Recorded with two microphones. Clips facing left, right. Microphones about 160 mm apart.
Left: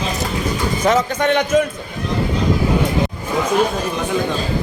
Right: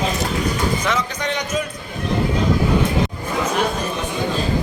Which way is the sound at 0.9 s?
50° left (ahead or behind).